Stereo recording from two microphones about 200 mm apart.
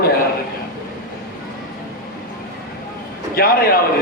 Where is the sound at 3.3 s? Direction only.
50° left (ahead or behind).